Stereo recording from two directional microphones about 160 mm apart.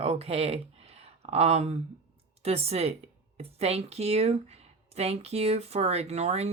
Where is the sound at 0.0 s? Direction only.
40° right (ahead or behind).